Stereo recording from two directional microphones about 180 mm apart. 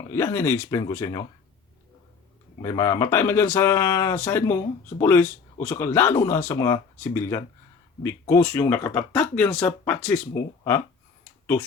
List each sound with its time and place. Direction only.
0.1 s speech: 15° left (ahead or behind)
2.6 s speech: 20° left (ahead or behind)
10.3 s speech: 20° left (ahead or behind)